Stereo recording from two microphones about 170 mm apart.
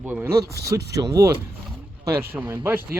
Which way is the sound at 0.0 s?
10° right (ahead or behind).